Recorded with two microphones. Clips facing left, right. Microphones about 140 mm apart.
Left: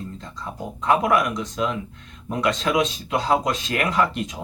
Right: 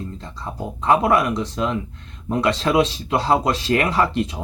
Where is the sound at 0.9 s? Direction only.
30° right (ahead or behind).